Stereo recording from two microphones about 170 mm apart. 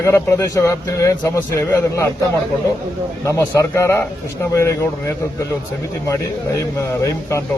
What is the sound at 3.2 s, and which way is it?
A man's voice, 20° left (ahead or behind).